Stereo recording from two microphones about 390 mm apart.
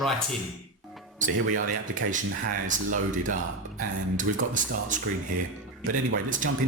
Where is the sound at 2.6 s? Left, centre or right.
Centre.